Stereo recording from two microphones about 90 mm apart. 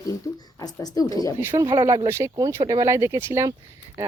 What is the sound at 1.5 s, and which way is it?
Speech, 65° right (ahead or behind).